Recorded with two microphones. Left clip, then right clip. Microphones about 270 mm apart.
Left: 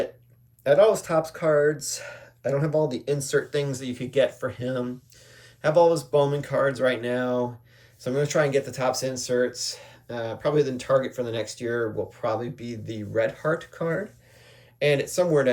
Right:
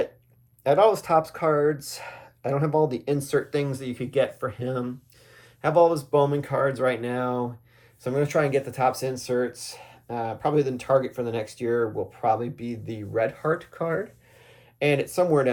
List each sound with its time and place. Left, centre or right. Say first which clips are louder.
0.6 s speech: left 1 dB; centre